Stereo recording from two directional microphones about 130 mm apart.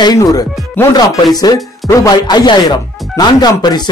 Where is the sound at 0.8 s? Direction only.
15° left (ahead or behind).